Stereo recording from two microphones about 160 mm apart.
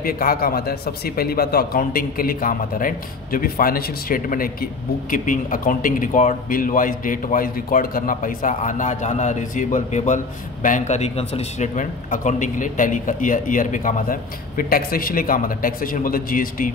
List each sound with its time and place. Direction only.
0.0 s a man's voice: 65° left (ahead or behind)